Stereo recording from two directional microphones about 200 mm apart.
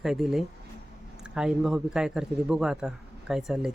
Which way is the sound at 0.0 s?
Centre (ahead or behind).